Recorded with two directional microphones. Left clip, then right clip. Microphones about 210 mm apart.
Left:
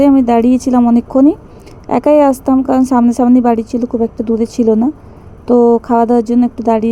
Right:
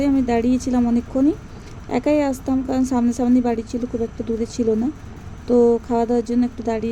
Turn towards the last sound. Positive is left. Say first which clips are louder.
# left 10 dB
turn(degrees=25)  # may be behind; listen again after turning